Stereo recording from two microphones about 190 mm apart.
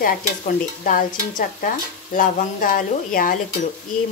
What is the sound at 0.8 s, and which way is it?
Speech, 45° left (ahead or behind).